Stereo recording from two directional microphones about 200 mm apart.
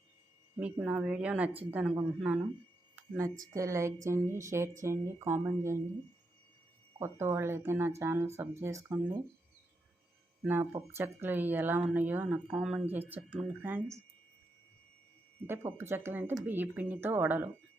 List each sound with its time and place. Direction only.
0.6 s a woman's voice: 5° right (ahead or behind)
2.9 s a sound: 15° right (ahead or behind)
3.4 s speech: 15° right (ahead or behind)
7.0 s speech: 15° right (ahead or behind)
10.4 s speech: 10° right (ahead or behind)
15.4 s speech: 10° right (ahead or behind)